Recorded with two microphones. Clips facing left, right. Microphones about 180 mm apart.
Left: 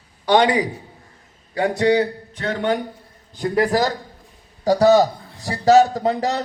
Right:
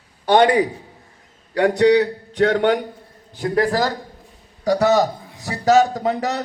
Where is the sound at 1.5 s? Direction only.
70° right (ahead or behind).